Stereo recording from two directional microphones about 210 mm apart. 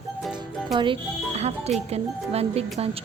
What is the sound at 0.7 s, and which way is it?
A woman's voice, 20° right (ahead or behind).